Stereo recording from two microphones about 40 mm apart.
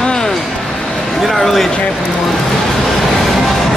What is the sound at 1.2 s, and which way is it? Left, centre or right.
Speech, centre.